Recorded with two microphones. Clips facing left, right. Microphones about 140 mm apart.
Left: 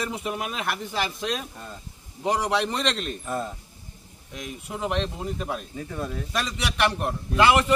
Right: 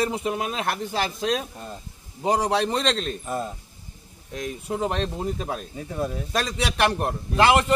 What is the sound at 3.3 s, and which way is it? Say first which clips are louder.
Speech: left 1 dB; 15° right (ahead or behind).